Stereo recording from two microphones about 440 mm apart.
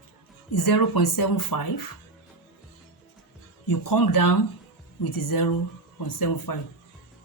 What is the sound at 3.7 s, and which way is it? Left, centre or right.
A woman's voice, left.